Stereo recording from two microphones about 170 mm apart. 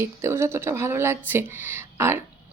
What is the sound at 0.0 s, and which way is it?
Speech, 15° right (ahead or behind).